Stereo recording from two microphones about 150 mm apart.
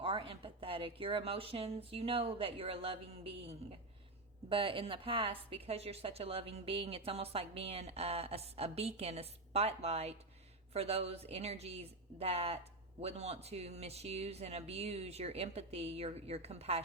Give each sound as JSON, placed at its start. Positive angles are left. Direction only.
{"t": 0.0, "sound": "speech", "side_deg": -35}